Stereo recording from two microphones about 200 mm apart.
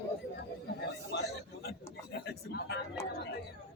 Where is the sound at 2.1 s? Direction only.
55° left (ahead or behind).